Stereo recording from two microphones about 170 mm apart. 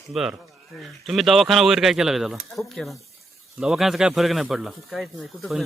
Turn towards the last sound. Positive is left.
turn(degrees=0)  # may be behind; listen again after turning